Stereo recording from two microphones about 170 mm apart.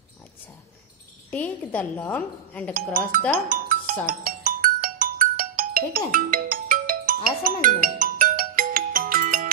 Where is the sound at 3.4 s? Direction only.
55° right (ahead or behind).